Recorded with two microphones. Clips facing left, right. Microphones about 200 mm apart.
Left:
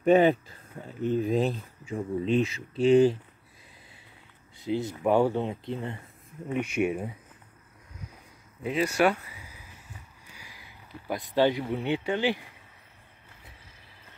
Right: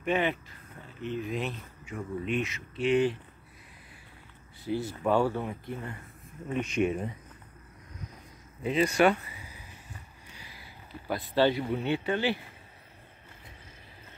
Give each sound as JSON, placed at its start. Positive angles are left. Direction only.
{"t": 0.0, "sound": "speech", "side_deg": 40}
{"t": 4.6, "sound": "speech", "side_deg": 20}
{"t": 6.5, "sound": "speech", "side_deg": 10}
{"t": 8.6, "sound": "speech", "side_deg": 5}
{"t": 10.3, "sound": "a sound", "side_deg": 15}
{"t": 11.1, "sound": "speech", "side_deg": 15}